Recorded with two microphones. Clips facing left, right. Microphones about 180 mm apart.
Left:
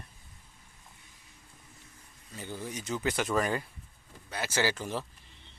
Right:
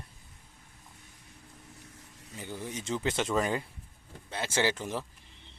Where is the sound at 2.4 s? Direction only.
15° right (ahead or behind).